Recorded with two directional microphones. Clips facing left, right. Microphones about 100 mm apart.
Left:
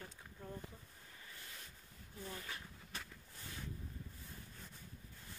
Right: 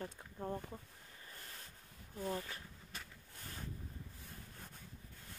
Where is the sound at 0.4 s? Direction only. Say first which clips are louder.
Right 8 dB; 65° right (ahead or behind).